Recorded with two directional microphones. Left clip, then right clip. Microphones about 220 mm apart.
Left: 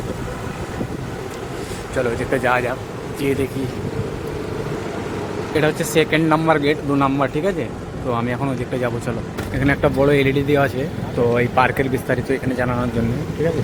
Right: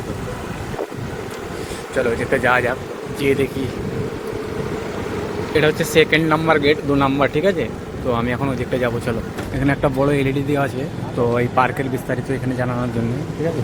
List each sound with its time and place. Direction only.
2.0 s a man's voice: 5° left (ahead or behind)
5.5 s a man's voice: 5° left (ahead or behind)